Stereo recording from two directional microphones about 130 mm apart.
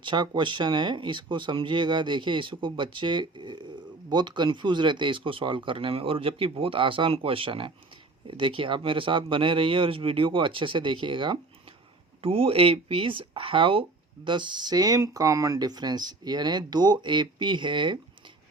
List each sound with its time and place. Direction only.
0.0 s speech: 35° right (ahead or behind)